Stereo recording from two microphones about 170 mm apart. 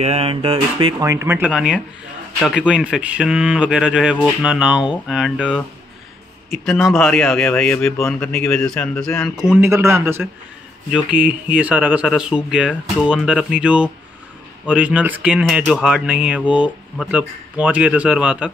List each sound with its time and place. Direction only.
0.0 s speech: 35° right (ahead or behind)
1.0 s speech: 15° right (ahead or behind)
1.5 s speech: 5° right (ahead or behind)
6.6 s speech: centre (ahead or behind)
9.6 s speech: 15° right (ahead or behind)